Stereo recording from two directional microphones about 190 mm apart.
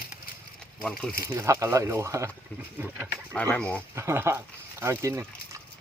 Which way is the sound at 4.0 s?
15° right (ahead or behind).